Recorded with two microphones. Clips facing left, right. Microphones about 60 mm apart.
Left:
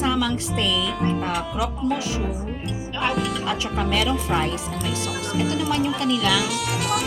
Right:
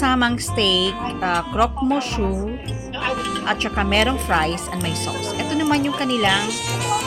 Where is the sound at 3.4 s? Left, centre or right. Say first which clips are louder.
Right 3 dB; right.